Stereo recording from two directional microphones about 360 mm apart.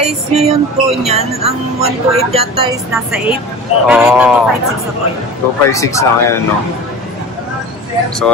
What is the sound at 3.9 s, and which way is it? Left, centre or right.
Speech, centre.